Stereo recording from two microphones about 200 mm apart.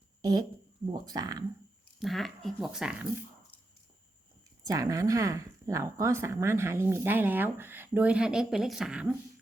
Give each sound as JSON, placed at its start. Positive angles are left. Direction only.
{"t": 0.2, "sound": "a woman's voice", "side_deg": -20}
{"t": 2.0, "sound": "speech", "side_deg": 0}
{"t": 4.6, "sound": "speech", "side_deg": -15}